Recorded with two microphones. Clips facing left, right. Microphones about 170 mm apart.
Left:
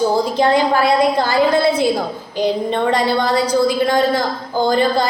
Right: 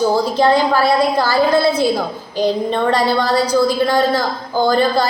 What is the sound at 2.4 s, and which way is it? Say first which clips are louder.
A woman's voice: right 1 dB; 20° left (ahead or behind).